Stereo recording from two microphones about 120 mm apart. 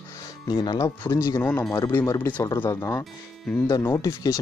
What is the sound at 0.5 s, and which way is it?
Speech, 35° left (ahead or behind).